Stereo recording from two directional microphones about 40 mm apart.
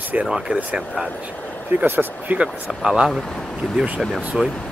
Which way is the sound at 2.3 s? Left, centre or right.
Right.